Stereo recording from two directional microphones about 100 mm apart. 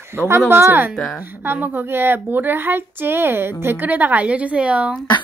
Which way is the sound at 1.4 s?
20° right (ahead or behind).